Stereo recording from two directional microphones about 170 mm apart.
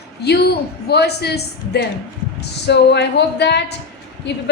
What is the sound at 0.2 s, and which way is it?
A woman's voice, 75° left (ahead or behind).